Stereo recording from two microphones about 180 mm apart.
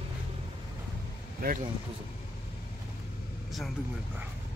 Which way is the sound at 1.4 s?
50° right (ahead or behind).